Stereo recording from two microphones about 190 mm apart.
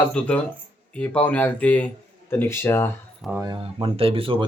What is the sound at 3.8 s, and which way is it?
Speech, 30° right (ahead or behind).